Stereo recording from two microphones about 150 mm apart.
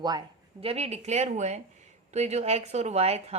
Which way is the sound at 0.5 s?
40° right (ahead or behind).